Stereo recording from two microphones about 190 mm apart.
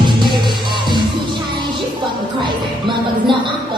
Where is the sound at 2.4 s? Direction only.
25° right (ahead or behind).